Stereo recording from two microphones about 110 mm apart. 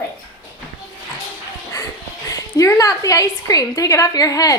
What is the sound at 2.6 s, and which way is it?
A woman's voice, 30° left (ahead or behind).